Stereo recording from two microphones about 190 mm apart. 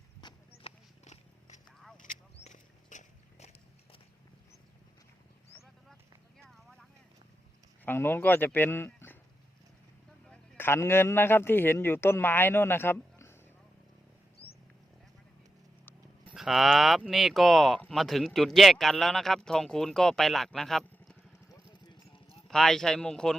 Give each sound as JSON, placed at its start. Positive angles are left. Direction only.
{"t": 0.2, "sound": "clip-clop", "side_deg": 25}
{"t": 1.0, "sound": "a sound", "side_deg": 40}
{"t": 7.9, "sound": "speech", "side_deg": 10}
{"t": 10.2, "sound": "a man's voice", "side_deg": 5}
{"t": 14.4, "sound": "a sound", "side_deg": 10}
{"t": 16.3, "sound": "speech", "side_deg": 0}
{"t": 22.4, "sound": "speech", "side_deg": 0}